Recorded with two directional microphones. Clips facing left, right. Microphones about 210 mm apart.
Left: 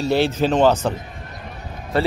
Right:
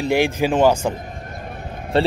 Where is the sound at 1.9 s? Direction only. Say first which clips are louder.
Right 2 dB; 25° right (ahead or behind).